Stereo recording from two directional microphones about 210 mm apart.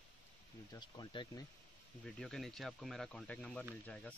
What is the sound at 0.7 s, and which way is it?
Speech, 20° left (ahead or behind).